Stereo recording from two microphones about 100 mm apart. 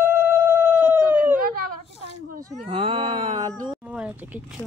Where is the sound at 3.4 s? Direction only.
40° right (ahead or behind).